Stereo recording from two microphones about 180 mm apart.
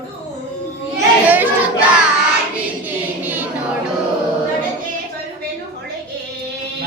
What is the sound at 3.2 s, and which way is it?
Music, 10° right (ahead or behind).